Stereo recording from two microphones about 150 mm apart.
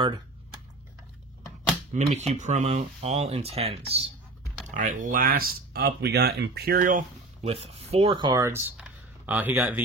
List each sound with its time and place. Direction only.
2.1 s speech: 50° right (ahead or behind)
4.6 s speech: 60° right (ahead or behind)
7.4 s speech: 45° right (ahead or behind)
8.2 s speech: 30° right (ahead or behind)
8.5 s speech: 15° right (ahead or behind)
8.7 s a sound: 10° right (ahead or behind)